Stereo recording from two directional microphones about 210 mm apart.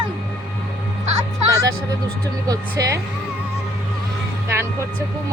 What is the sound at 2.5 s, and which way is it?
Speech, 15° right (ahead or behind).